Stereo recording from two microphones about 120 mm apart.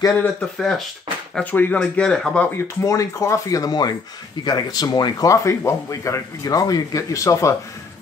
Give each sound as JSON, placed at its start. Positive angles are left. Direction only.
{"t": 0.6, "sound": "speech", "side_deg": 5}
{"t": 1.3, "sound": "speech", "side_deg": 15}
{"t": 2.5, "sound": "a man's voice", "side_deg": 25}